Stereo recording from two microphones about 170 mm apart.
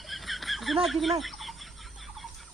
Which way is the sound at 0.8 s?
Centre (ahead or behind).